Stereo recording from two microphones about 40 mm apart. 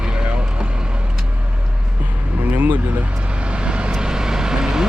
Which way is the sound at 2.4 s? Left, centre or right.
Right.